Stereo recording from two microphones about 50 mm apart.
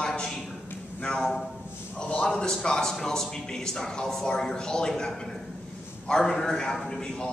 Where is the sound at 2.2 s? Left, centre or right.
Centre.